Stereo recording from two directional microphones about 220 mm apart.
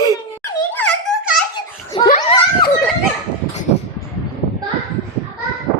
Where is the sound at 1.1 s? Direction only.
5° left (ahead or behind).